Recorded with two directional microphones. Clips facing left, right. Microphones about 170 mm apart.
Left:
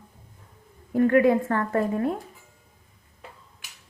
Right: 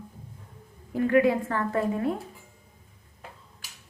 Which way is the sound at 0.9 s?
50° left (ahead or behind).